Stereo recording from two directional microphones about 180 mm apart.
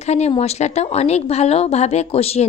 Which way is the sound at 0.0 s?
35° left (ahead or behind).